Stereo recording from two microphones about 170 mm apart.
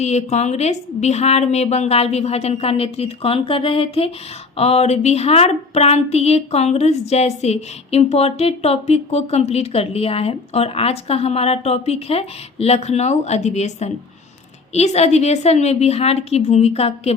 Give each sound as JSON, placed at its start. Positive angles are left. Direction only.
{"t": 0.0, "sound": "a woman's voice", "side_deg": 40}